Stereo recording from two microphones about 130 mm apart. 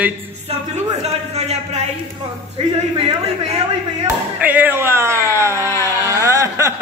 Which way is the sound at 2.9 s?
45° right (ahead or behind).